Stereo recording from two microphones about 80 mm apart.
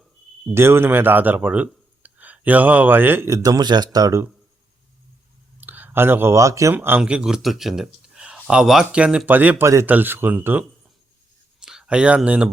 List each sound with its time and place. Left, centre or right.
0.5 s speech: right
3.2 s speech: right
5.5 s a sound: right
6.3 s speech: right
6.7 s speech: right
7.0 s speech: centre
9.6 s speech: right
9.8 s speech: right
11.6 s speech: centre